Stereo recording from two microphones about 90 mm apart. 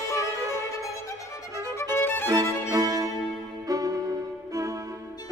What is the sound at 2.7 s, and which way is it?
Music, 40° right (ahead or behind).